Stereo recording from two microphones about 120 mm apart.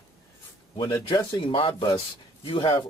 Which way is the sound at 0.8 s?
35° left (ahead or behind).